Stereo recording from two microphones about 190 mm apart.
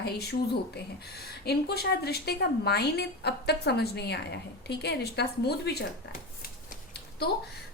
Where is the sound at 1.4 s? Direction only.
55° left (ahead or behind).